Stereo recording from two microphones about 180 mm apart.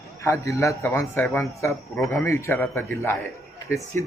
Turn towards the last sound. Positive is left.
turn(degrees=15)  # may be behind; listen again after turning